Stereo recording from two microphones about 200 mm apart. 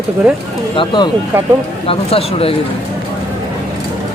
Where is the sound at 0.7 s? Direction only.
25° left (ahead or behind).